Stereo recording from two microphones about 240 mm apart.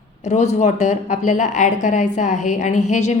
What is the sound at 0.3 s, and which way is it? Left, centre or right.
A woman's voice, left.